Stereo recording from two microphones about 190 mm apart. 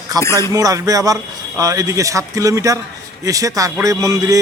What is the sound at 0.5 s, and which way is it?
A man's voice, 20° right (ahead or behind).